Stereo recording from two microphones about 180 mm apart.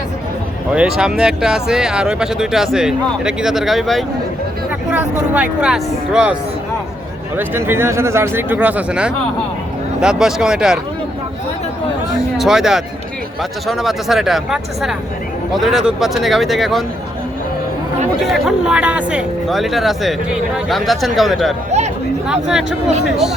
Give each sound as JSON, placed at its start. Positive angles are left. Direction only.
{"t": 0.7, "sound": "speech", "side_deg": -5}
{"t": 7.3, "sound": "speech", "side_deg": -10}
{"t": 12.4, "sound": "speech", "side_deg": -5}
{"t": 18.3, "sound": "speech", "side_deg": 0}